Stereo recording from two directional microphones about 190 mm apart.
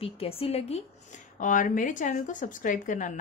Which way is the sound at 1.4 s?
45° left (ahead or behind).